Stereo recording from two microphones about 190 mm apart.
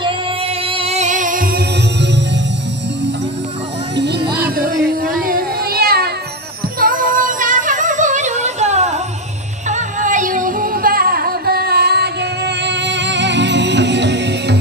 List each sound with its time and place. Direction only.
0.7 s music: 35° right (ahead or behind); by 2.2 s 60° right (ahead or behind)
3.9 s music: 60° right (ahead or behind)